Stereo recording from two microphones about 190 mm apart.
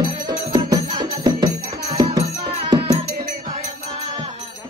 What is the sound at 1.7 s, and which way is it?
Music, 55° right (ahead or behind).